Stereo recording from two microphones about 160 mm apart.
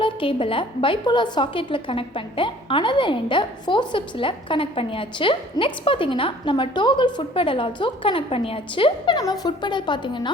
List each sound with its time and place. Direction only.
0.0 s a woman's voice: 35° left (ahead or behind)